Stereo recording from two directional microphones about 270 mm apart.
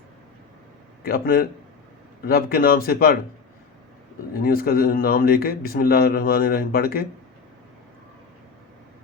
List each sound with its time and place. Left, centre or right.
1.0 s a man's voice: left
4.4 s a man's voice: left